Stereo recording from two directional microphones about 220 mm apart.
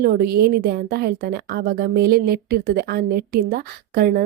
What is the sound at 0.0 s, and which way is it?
A woman's voice, 45° right (ahead or behind).